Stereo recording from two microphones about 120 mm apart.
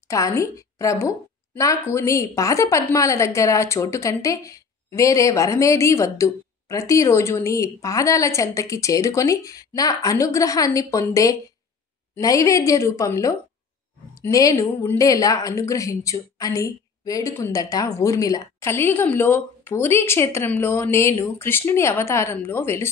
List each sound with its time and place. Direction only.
0.1 s a woman's voice: 25° left (ahead or behind)